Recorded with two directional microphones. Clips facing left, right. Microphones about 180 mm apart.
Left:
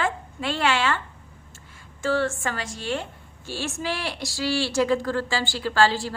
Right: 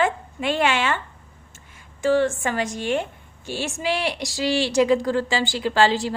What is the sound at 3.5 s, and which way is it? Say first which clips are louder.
Speech: right 4 dB; 15° right (ahead or behind).